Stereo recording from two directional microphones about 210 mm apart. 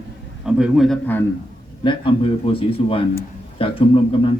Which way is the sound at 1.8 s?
25° left (ahead or behind).